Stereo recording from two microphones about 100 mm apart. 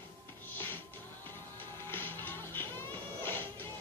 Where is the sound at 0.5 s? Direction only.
20° left (ahead or behind).